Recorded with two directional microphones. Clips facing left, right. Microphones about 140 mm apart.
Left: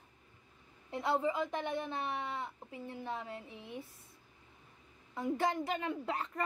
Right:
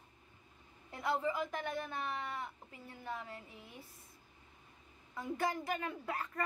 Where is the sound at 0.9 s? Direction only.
25° left (ahead or behind).